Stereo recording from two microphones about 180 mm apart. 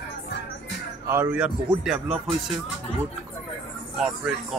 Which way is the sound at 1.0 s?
15° right (ahead or behind).